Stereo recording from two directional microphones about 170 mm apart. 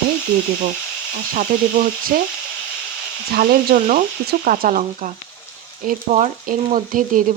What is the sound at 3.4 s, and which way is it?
Speech, 55° right (ahead or behind).